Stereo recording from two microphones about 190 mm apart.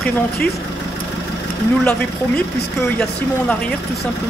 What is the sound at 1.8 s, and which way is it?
Speech, 5° left (ahead or behind).